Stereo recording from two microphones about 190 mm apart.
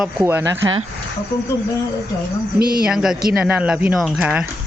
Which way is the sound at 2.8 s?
5° right (ahead or behind).